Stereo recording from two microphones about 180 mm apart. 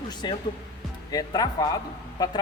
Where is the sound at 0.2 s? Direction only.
25° left (ahead or behind).